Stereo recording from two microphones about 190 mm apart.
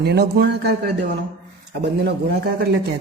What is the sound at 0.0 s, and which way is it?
Speech, 60° right (ahead or behind).